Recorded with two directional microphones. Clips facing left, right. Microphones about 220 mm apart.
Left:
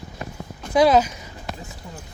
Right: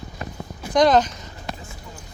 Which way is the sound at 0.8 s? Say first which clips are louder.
Even; 5° left (ahead or behind).